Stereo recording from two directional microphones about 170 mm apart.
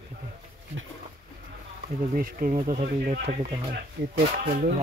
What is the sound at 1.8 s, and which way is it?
Speech, 55° right (ahead or behind).